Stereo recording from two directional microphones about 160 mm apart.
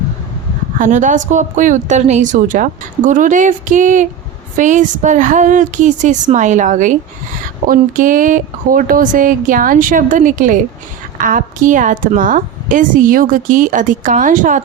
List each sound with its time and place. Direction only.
0.8 s a woman's voice: 50° right (ahead or behind)